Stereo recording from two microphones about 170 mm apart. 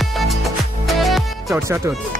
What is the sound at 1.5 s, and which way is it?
Speech, 15° right (ahead or behind).